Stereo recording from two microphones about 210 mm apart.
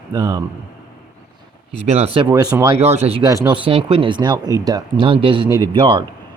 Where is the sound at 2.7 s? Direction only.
30° right (ahead or behind).